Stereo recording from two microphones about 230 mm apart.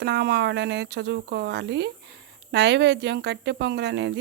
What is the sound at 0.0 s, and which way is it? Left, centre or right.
Speech, right.